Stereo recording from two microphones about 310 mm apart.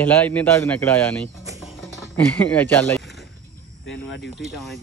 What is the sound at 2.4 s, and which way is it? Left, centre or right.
Speech, centre.